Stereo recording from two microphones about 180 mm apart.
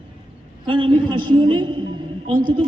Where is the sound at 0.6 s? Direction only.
25° right (ahead or behind).